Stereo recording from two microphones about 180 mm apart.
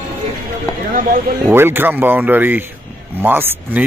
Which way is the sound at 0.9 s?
50° right (ahead or behind).